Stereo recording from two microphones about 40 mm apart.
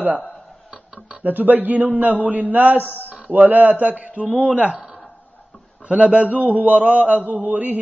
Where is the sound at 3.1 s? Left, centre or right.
Right.